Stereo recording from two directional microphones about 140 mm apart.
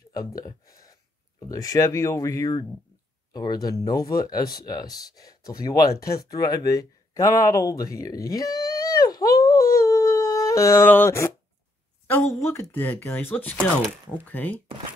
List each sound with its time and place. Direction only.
0.1 s speech: 25° left (ahead or behind)
3.6 s speech: 25° left (ahead or behind)
6.2 s a sound: 25° left (ahead or behind)
12.1 s speech: 15° left (ahead or behind)